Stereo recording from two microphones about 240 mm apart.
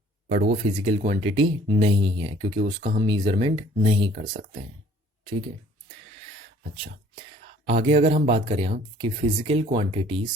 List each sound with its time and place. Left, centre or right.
0.3 s speech: right
5.2 s speech: right
7.7 s speech: right